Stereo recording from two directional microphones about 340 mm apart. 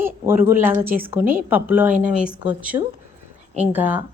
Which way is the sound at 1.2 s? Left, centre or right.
Right.